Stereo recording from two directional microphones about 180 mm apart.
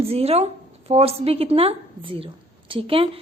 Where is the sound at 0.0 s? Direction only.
35° right (ahead or behind).